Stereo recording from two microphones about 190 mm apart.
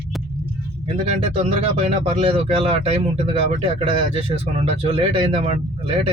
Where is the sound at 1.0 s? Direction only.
35° right (ahead or behind).